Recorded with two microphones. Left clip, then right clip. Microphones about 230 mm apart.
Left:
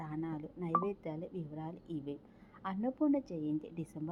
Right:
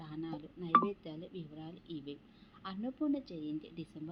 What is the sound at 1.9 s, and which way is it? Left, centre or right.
Speech, left.